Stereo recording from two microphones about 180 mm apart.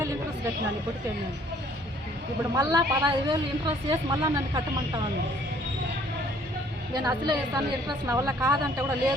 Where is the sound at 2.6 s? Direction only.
20° right (ahead or behind).